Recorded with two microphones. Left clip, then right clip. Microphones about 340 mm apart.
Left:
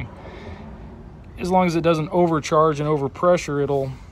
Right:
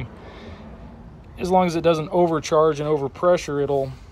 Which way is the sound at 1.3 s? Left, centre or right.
Centre.